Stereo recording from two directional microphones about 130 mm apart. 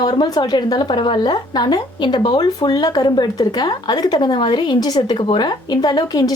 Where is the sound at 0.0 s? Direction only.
35° left (ahead or behind).